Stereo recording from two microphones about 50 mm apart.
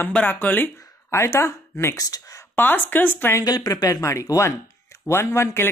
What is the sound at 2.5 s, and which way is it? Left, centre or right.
Speech, left.